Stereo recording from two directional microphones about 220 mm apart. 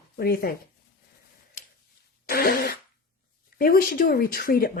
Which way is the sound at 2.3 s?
40° left (ahead or behind).